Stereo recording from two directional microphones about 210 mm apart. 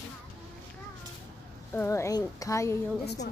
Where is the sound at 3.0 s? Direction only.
50° left (ahead or behind).